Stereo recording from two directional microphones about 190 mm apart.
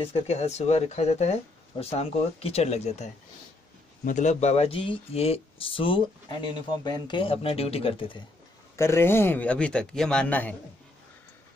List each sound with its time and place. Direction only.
0.0 s speech: 30° left (ahead or behind)
8.7 s a man's voice: 15° left (ahead or behind)